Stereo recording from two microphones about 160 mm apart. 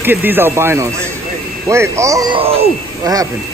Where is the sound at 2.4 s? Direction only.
40° right (ahead or behind).